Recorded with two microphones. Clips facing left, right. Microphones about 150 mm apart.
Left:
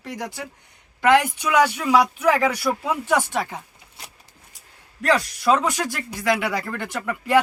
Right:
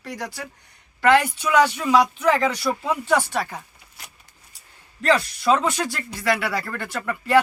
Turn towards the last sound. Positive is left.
turn(degrees=15)  # may be behind; listen again after turning